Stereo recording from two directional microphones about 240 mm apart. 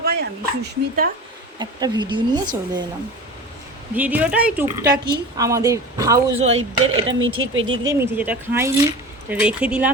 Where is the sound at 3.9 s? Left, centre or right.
Centre.